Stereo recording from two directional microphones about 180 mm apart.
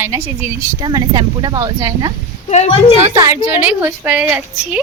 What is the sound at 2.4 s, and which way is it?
Speech, 40° left (ahead or behind).